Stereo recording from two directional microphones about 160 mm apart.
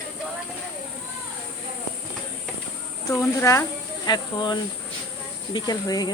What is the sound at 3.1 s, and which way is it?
A woman's voice, 15° left (ahead or behind).